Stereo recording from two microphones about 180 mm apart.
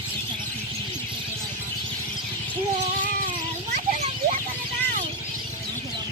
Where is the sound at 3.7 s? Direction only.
40° right (ahead or behind).